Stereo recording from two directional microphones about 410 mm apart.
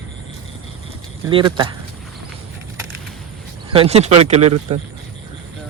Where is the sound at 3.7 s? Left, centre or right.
Centre.